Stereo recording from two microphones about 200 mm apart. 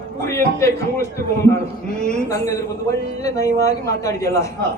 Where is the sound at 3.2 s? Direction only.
15° left (ahead or behind).